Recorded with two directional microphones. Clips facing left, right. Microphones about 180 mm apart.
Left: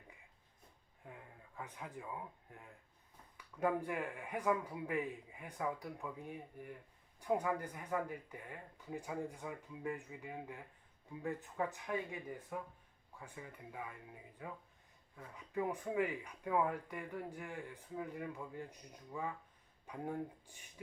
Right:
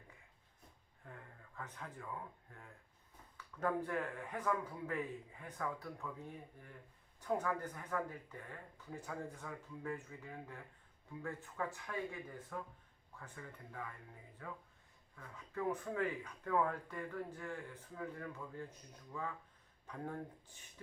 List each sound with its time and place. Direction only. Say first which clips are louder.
1.0 s speech: left 1 dB; 15° left (ahead or behind)